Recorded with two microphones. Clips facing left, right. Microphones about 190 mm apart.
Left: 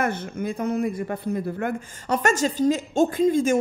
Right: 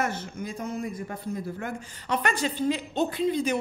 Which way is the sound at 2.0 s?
45° left (ahead or behind).